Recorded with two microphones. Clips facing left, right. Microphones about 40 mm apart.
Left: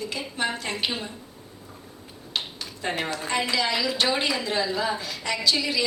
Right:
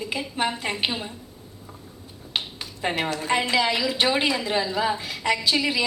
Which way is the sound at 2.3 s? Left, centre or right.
Centre.